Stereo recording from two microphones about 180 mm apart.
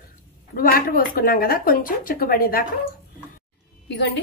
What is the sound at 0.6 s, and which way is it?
Speech, 55° left (ahead or behind).